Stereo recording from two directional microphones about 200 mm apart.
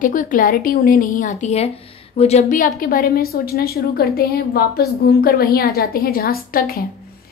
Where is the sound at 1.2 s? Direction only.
35° left (ahead or behind).